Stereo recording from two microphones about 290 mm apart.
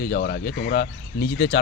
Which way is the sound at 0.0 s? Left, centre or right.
Left.